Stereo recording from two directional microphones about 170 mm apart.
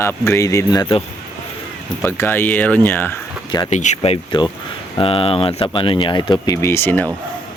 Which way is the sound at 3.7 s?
45° left (ahead or behind).